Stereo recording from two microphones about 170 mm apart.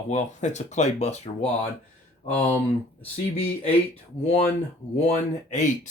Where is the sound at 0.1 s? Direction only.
45° left (ahead or behind).